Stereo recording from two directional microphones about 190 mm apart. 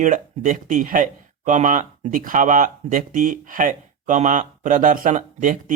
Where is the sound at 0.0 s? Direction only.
45° right (ahead or behind).